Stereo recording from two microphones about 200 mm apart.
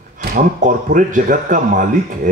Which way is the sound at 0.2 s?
45° right (ahead or behind).